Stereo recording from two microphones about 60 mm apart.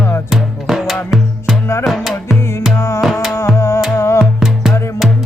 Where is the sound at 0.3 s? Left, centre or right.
Centre.